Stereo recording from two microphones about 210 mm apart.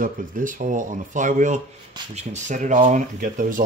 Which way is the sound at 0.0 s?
40° right (ahead or behind).